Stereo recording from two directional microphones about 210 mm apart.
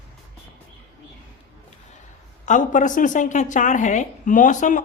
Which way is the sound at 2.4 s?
35° left (ahead or behind).